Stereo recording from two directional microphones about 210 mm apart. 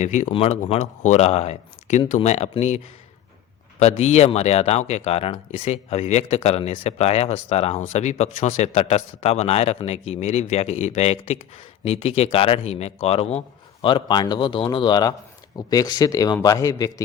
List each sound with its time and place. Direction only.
0.0 s a man's voice: 35° left (ahead or behind); by 16.9 s 15° left (ahead or behind)